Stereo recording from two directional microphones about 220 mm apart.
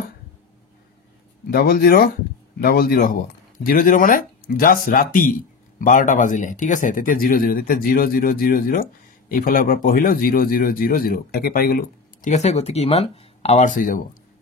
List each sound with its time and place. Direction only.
1.5 s speech: 45° left (ahead or behind)